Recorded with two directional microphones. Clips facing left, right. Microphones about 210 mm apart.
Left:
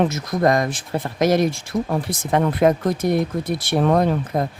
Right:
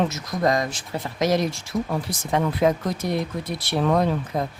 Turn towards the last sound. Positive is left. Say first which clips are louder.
# left 3 dB
turn(degrees=50)  # may be behind; listen again after turning